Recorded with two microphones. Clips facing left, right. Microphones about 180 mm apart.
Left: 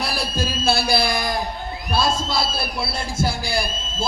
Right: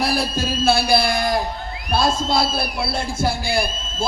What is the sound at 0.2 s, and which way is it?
Speech, 55° right (ahead or behind).